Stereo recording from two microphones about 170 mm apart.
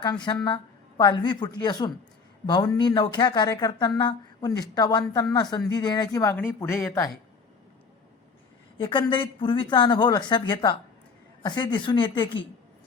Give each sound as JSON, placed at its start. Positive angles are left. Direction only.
{"t": 0.0, "sound": "speech", "side_deg": 25}
{"t": 8.8, "sound": "speech", "side_deg": 30}